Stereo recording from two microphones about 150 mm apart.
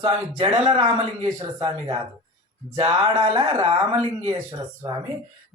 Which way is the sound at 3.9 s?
35° right (ahead or behind).